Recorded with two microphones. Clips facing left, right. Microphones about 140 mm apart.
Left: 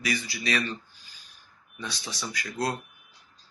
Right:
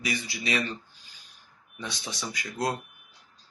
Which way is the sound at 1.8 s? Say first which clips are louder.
Even; 20° right (ahead or behind).